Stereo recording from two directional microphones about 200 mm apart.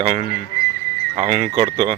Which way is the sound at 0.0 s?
30° right (ahead or behind).